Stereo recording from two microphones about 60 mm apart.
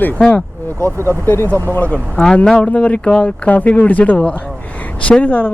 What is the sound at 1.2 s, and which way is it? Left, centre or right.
Speech, left.